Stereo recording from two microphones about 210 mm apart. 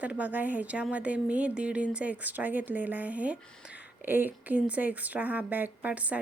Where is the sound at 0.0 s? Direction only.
5° right (ahead or behind).